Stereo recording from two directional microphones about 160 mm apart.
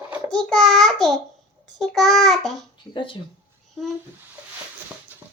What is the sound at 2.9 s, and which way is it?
Speech, 30° left (ahead or behind).